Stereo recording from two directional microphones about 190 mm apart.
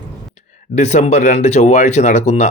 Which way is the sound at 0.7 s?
35° left (ahead or behind).